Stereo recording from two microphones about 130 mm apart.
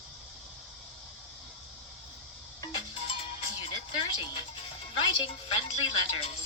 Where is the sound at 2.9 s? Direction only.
45° left (ahead or behind).